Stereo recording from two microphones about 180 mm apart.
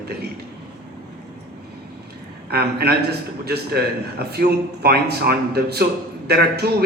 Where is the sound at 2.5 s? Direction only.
60° right (ahead or behind).